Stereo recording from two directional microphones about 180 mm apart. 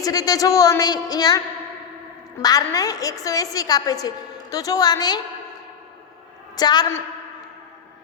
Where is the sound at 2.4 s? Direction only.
20° left (ahead or behind).